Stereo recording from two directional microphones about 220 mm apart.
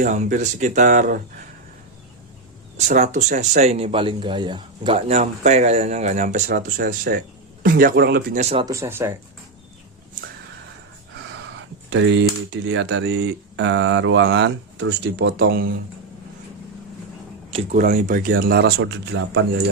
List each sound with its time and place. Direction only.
0.0 s speech: 35° right (ahead or behind)
2.7 s speech: 35° right (ahead or behind)
8.4 s speech: 30° right (ahead or behind)
8.6 s speech: 10° right (ahead or behind)
11.9 s speech: 55° right (ahead or behind)
17.5 s speech: 30° right (ahead or behind); by 19.5 s 50° right (ahead or behind)